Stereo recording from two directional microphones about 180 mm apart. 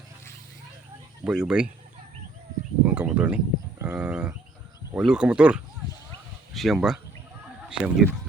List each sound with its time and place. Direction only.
1.2 s speech: 5° right (ahead or behind)
2.8 s a sound: 5° right (ahead or behind)
3.8 s livestock: 5° right (ahead or behind)
4.9 s speech: 5° right (ahead or behind)